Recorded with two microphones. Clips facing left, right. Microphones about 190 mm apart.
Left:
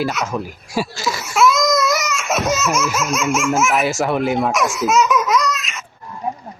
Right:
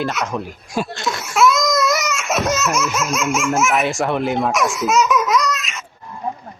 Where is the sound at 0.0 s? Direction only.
Centre (ahead or behind).